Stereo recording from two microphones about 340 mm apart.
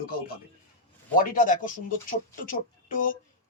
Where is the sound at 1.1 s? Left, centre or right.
Left.